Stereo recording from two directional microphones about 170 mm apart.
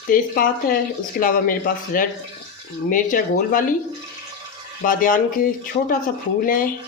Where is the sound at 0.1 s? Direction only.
60° left (ahead or behind).